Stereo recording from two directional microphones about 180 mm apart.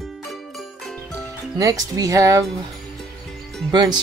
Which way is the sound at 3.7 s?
25° right (ahead or behind).